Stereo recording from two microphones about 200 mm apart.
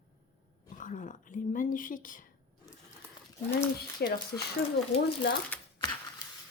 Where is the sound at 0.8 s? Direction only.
40° left (ahead or behind).